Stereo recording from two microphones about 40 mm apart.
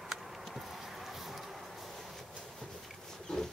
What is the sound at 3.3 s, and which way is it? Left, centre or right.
Wild animals, centre.